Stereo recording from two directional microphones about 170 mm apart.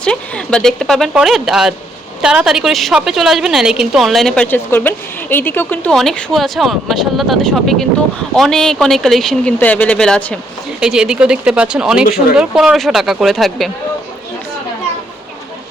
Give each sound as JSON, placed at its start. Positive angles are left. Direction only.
{"t": 0.0, "sound": "a woman's voice", "side_deg": 5}
{"t": 10.8, "sound": "a woman's voice", "side_deg": -5}